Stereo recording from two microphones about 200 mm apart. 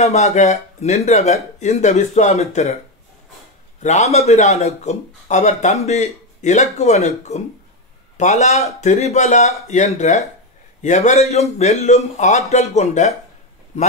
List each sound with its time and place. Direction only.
0.0 s speech: 35° left (ahead or behind)
3.8 s speech: 35° left (ahead or behind)